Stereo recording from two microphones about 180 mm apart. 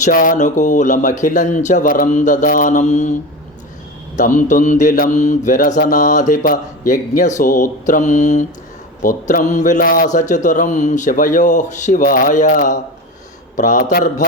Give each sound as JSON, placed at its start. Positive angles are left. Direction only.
{"t": 0.0, "sound": "mantra", "side_deg": 50}
{"t": 4.2, "sound": "mantra", "side_deg": 45}